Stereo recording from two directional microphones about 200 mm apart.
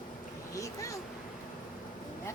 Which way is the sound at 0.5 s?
15° left (ahead or behind).